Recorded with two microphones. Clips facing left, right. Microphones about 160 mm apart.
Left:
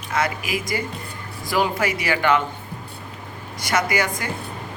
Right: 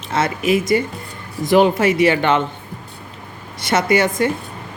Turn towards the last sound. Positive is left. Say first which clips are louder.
# right 8 dB
turn(degrees=-25)  # may be behind; listen again after turning